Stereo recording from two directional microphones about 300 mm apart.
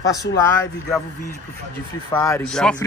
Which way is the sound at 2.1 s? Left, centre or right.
Centre.